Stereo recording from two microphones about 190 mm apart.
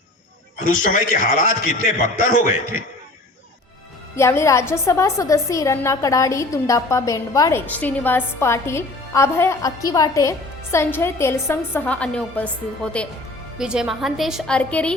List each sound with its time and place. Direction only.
0.9 s a man's voice: 40° left (ahead or behind)
4.1 s a woman's voice: 15° left (ahead or behind)